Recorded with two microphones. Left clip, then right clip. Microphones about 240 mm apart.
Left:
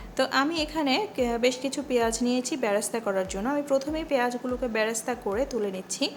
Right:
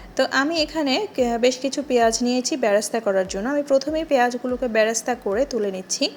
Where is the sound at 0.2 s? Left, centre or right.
Centre.